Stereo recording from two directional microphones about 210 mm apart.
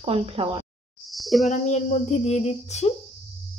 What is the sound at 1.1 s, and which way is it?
Speech, centre (ahead or behind).